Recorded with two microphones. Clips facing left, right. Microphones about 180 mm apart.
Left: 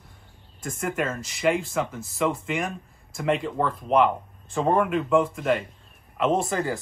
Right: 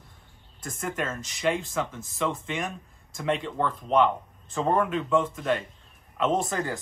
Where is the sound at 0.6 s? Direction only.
Centre (ahead or behind).